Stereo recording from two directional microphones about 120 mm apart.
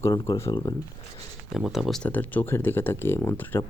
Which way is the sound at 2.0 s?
15° left (ahead or behind).